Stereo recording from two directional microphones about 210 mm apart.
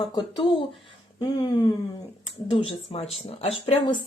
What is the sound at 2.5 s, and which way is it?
Speech, 25° left (ahead or behind).